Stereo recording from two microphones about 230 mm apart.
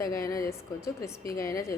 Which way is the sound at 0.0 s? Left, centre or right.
Left.